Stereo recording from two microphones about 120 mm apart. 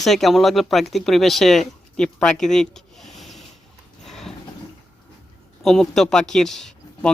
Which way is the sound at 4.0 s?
5° left (ahead or behind).